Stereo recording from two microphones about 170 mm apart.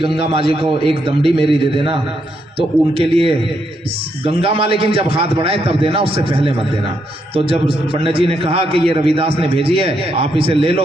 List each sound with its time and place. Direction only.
0.0 s a man's voice: 35° right (ahead or behind)